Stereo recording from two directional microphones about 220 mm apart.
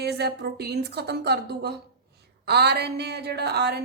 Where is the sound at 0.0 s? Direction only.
50° right (ahead or behind).